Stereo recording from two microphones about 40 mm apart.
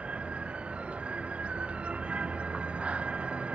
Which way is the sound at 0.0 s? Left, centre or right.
Right.